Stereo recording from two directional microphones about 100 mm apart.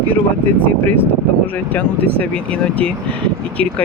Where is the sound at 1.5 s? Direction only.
15° left (ahead or behind).